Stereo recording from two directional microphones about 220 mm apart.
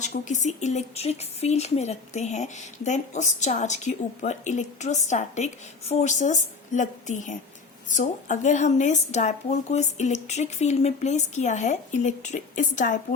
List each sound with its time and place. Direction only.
0.0 s speech: 35° left (ahead or behind)